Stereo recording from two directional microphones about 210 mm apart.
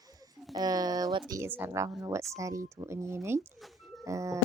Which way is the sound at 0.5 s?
15° right (ahead or behind).